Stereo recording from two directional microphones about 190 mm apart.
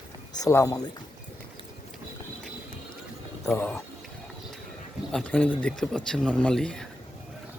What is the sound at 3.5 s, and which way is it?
Speech, 10° left (ahead or behind).